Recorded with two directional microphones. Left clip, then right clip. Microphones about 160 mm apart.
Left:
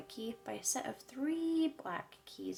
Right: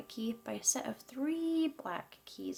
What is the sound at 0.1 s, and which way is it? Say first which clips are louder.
A woman's voice: right 2 dB; 25° right (ahead or behind).